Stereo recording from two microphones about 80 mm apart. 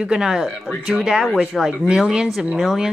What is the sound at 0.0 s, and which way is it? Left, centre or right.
A man's voice, centre.